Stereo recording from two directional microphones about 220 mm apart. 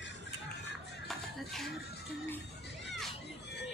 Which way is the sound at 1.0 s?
Centre (ahead or behind).